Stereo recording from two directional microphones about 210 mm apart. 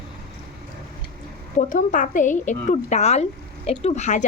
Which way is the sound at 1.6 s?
35° left (ahead or behind).